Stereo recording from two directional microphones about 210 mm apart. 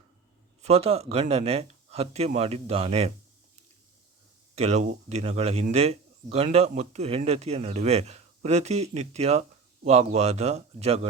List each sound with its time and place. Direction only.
0.6 s speech: 30° right (ahead or behind)
4.5 s speech: 30° right (ahead or behind)